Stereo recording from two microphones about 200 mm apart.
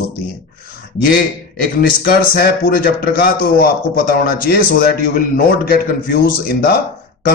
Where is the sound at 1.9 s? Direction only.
50° left (ahead or behind).